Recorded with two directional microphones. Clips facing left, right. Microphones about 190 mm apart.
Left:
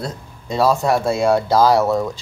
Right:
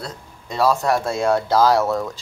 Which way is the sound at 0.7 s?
10° left (ahead or behind).